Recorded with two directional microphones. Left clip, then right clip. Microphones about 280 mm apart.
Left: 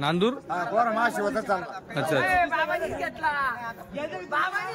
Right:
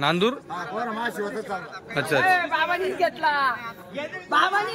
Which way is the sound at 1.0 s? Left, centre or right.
Centre.